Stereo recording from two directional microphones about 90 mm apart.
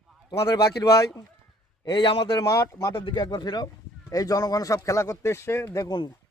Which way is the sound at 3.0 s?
60° left (ahead or behind).